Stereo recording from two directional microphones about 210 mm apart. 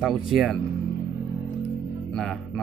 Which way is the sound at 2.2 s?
Centre (ahead or behind).